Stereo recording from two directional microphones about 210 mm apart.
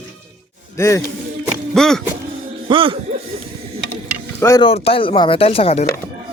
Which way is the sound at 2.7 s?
25° right (ahead or behind).